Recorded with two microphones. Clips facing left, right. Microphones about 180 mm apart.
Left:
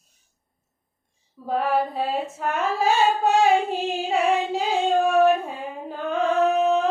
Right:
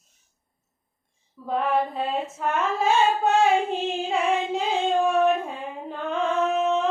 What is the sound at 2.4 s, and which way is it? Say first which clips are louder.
Female singing: even; 35° left (ahead or behind).